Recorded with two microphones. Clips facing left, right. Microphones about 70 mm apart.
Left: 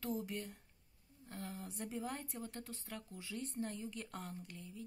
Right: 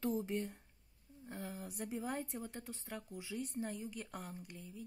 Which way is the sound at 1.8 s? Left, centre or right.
Centre.